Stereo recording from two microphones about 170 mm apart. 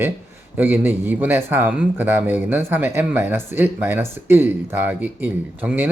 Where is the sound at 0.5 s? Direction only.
10° right (ahead or behind).